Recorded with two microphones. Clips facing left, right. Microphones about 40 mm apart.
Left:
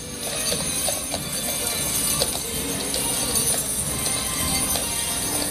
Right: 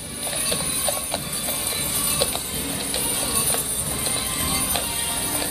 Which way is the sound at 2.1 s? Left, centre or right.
Centre.